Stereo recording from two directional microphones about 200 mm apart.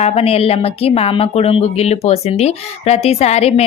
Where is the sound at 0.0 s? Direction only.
30° left (ahead or behind).